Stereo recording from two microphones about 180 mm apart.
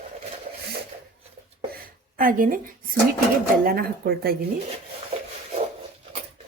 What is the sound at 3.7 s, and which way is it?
Speech, 60° right (ahead or behind).